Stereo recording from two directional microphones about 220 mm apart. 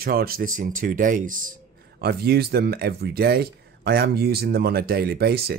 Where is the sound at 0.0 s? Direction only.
45° right (ahead or behind).